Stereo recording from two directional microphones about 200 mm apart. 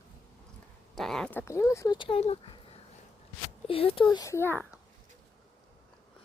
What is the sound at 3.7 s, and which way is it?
Speech, 30° left (ahead or behind).